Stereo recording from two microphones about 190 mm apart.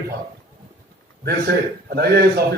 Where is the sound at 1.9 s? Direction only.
55° right (ahead or behind).